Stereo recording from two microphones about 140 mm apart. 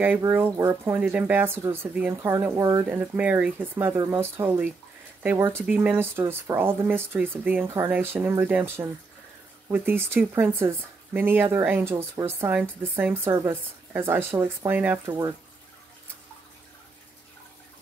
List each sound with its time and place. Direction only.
0.3 s speech: 15° right (ahead or behind)